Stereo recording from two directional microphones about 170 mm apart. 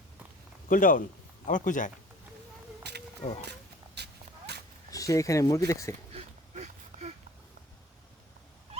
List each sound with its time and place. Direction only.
0.7 s a man's voice: 55° left (ahead or behind)
2.8 s a sound: 80° right
3.4 s dog: 80° right
4.9 s speech: 20° left (ahead or behind)
6.1 s oink: 40° right (ahead or behind)